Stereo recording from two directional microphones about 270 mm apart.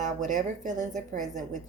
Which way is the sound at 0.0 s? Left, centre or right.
Right.